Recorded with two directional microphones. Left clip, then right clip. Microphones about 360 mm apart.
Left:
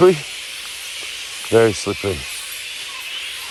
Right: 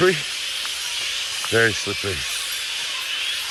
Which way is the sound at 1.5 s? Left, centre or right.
Left.